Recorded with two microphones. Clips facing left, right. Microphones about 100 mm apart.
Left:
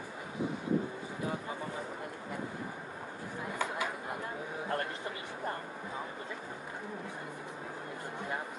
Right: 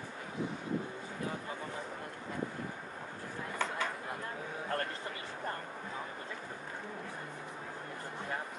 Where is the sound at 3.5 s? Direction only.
10° left (ahead or behind).